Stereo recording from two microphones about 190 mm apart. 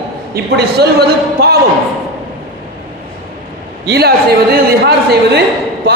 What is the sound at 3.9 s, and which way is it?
A man's voice, 55° right (ahead or behind).